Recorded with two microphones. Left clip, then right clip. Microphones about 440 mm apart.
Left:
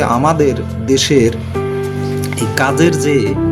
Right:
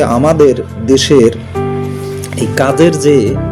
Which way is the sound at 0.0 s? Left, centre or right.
Left.